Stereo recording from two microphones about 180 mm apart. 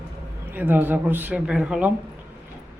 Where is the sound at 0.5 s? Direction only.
10° right (ahead or behind).